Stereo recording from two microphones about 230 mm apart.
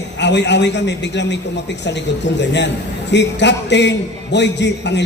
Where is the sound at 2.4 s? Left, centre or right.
Left.